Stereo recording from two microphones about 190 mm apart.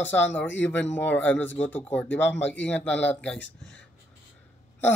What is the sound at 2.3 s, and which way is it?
Speech, 70° left (ahead or behind).